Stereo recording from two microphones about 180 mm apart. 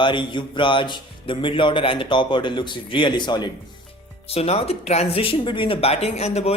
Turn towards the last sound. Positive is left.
turn(degrees=35)  # may be behind; listen again after turning